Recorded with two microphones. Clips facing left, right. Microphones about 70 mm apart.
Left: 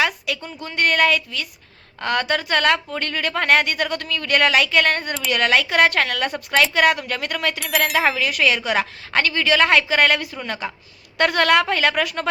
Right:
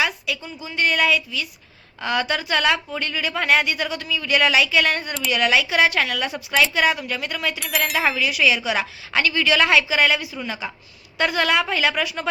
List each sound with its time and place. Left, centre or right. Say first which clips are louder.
0.0 s a woman's voice: left 2 dB; left
8.2 s a woman's voice: even; left